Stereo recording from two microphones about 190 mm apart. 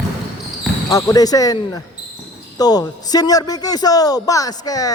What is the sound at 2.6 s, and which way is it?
Speech, 20° left (ahead or behind).